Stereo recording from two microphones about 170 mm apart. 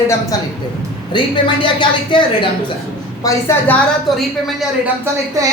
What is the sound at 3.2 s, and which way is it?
Speech, 15° left (ahead or behind).